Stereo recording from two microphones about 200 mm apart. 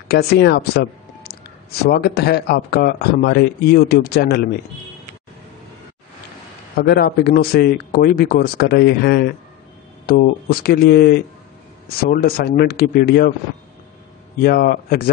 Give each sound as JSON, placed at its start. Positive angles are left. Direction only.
{"t": 0.1, "sound": "speech", "side_deg": 55}
{"t": 6.8, "sound": "speech", "side_deg": 50}
{"t": 14.4, "sound": "speech", "side_deg": 50}